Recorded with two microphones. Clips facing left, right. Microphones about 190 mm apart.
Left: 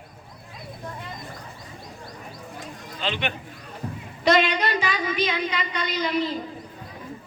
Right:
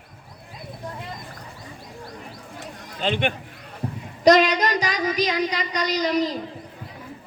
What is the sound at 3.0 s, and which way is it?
A man's voice, 50° right (ahead or behind).